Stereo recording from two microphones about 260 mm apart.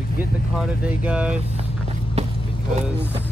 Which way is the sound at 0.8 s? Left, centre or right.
Centre.